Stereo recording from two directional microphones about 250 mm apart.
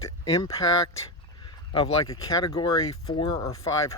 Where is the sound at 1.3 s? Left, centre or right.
Centre.